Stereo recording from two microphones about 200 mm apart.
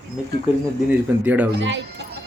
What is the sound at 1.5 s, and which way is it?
Speech, 60° right (ahead or behind).